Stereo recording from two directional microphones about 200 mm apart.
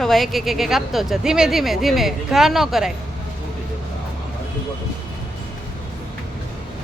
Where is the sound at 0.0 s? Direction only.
Centre (ahead or behind).